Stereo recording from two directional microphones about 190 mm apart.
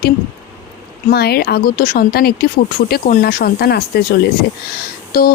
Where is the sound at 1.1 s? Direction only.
55° left (ahead or behind).